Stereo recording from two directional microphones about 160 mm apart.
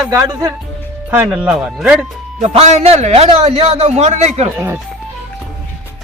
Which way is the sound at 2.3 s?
45° right (ahead or behind).